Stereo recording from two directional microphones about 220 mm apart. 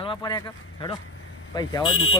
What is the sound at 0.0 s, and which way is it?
Speech, 20° left (ahead or behind).